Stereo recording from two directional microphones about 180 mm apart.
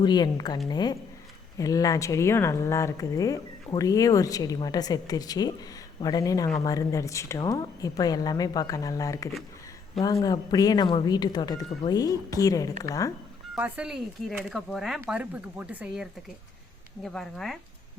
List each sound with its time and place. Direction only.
0.0 s speech: 25° left (ahead or behind)
13.6 s speech: 5° right (ahead or behind)
17.0 s speech: 5° left (ahead or behind)